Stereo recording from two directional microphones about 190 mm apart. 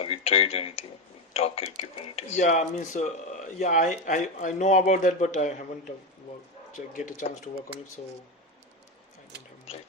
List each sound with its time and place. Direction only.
0.0 s speech: 30° left (ahead or behind)
6.7 s speech: 40° left (ahead or behind)